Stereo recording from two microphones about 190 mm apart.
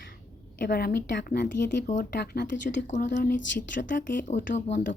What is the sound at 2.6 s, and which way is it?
Speech, 40° left (ahead or behind).